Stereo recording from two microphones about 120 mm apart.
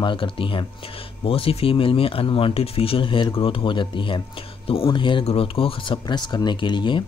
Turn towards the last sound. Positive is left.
turn(degrees=40)  # may be behind; listen again after turning